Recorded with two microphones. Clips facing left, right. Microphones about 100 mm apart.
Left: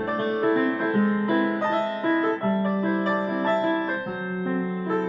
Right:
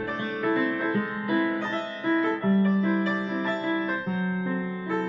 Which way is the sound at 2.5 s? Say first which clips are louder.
Right 1 dB; 40° left (ahead or behind).